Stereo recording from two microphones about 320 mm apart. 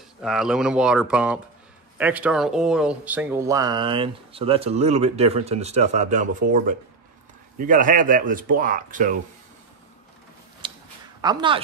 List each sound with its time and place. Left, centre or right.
0.2 s speech: centre; by 9.2 s right
10.6 s a sound: centre
11.1 s speech: centre